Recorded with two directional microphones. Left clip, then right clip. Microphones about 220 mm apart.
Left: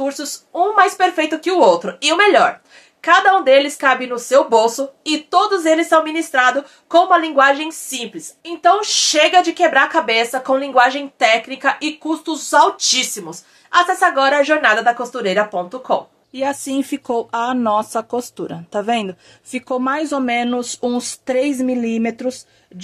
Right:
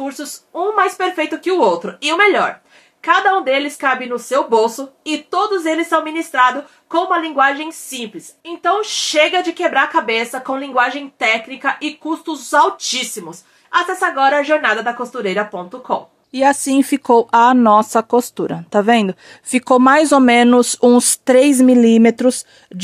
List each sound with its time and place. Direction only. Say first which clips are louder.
0.0 s speech: left 3 dB; 5° left (ahead or behind)
16.3 s speech: right 7 dB; 40° right (ahead or behind)